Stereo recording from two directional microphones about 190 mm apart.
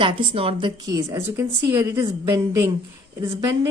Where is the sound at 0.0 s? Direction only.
25° right (ahead or behind).